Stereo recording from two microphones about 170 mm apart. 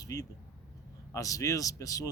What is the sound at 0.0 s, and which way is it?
A man's voice, 20° left (ahead or behind).